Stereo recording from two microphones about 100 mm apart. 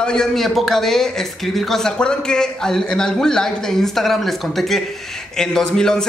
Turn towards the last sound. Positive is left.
turn(degrees=5)  # may be behind; listen again after turning